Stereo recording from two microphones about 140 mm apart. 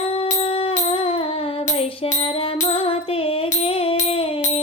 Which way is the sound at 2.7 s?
40° left (ahead or behind).